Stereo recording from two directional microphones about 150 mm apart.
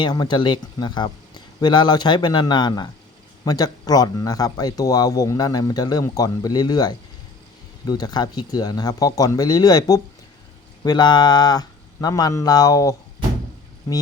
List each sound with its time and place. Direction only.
0.0 s speech: 30° left (ahead or behind)